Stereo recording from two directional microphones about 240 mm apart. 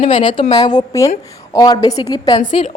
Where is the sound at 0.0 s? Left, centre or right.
Left.